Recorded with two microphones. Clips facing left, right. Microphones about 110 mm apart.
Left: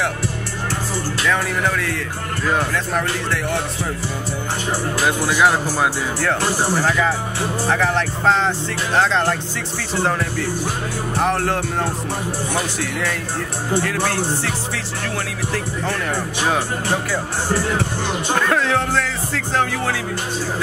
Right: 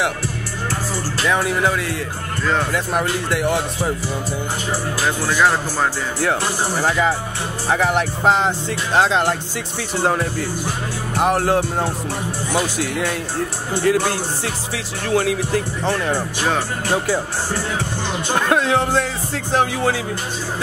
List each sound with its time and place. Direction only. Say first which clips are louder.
1.2 s speech: right 3 dB; 20° right (ahead or behind)
5.0 s speech: left 1 dB; 10° left (ahead or behind)
6.8 s speech: even; 20° right (ahead or behind)
11.1 s speech: right 3 dB; 15° right (ahead or behind)
13.8 s speech: right 3 dB; 15° right (ahead or behind)
18.3 s speech: right 2 dB; 20° right (ahead or behind)